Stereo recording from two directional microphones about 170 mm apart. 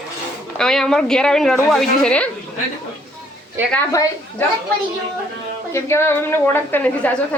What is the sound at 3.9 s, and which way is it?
Speech, 20° left (ahead or behind).